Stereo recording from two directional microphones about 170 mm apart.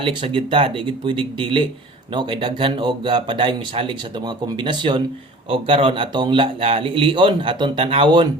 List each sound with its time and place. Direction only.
0.0 s a man's voice: 30° right (ahead or behind)